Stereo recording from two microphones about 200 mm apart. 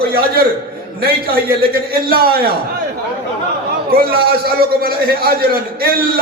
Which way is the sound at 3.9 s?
50° right (ahead or behind).